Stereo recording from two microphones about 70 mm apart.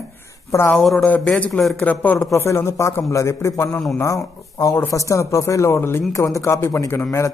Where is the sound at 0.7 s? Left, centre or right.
Centre.